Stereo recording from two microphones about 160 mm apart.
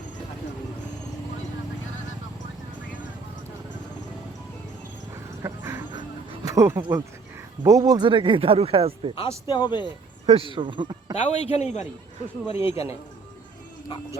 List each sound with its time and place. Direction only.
5.4 s a sound: 15° right (ahead or behind)
7.6 s speech: 20° right (ahead or behind)
9.5 s speech: 30° left (ahead or behind)
10.2 s speech: 35° right (ahead or behind)
11.1 s a man's voice: 45° left (ahead or behind)
12.5 s a man's voice: 15° right (ahead or behind)